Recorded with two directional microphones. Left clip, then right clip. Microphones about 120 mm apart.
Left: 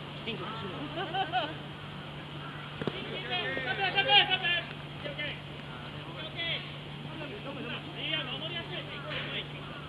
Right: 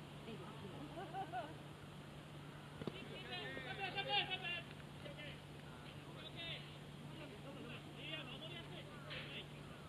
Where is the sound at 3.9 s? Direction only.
5° left (ahead or behind).